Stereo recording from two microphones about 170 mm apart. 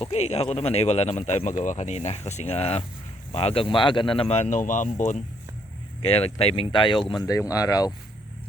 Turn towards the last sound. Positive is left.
turn(degrees=20)  # may be behind; listen again after turning